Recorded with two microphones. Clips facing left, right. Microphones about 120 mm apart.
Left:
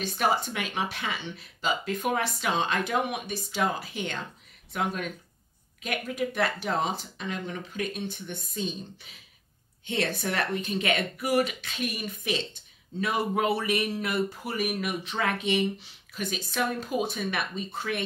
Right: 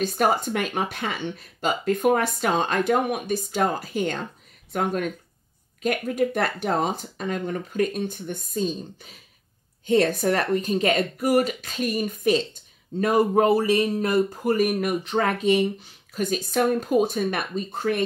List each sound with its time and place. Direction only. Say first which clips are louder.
0.0 s speech: right 5 dB; 45° right (ahead or behind)